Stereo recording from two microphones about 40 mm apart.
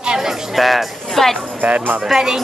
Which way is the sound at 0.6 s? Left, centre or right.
Centre.